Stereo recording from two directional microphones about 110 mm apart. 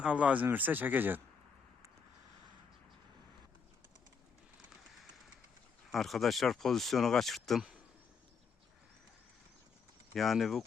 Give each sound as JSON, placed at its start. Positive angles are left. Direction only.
{"t": 0.0, "sound": "speech", "side_deg": -10}
{"t": 5.9, "sound": "speech", "side_deg": 0}
{"t": 10.2, "sound": "speech", "side_deg": 0}